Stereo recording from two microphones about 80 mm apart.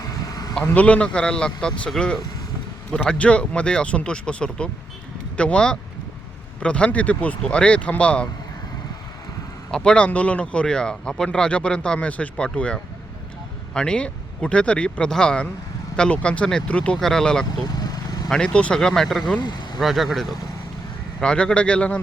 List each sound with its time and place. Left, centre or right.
0.7 s speech: centre
9.7 s speech: centre
17.8 s vehicle: left
18.3 s speech: centre
19.4 s speech: left
19.8 s speech: centre
21.2 s speech: centre